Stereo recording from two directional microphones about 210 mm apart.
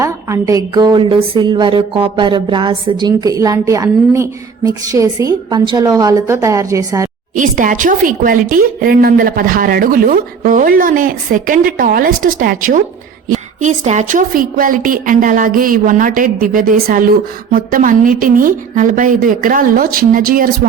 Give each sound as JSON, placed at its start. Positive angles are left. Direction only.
{"t": 0.0, "sound": "a woman's voice", "side_deg": -15}
{"t": 7.3, "sound": "speech", "side_deg": -40}